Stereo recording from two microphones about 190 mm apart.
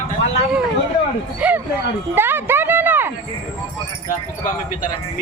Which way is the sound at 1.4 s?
10° right (ahead or behind).